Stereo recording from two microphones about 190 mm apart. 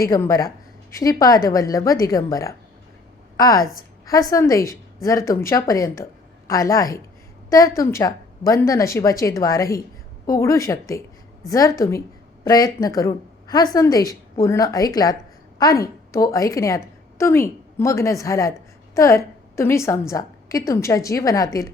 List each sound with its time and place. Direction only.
0.1 s a woman's voice: 15° left (ahead or behind)